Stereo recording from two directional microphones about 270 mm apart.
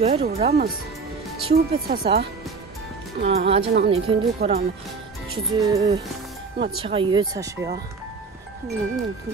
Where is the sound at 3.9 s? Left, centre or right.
Right.